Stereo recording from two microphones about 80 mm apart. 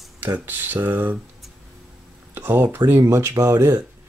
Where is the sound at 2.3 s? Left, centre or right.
Right.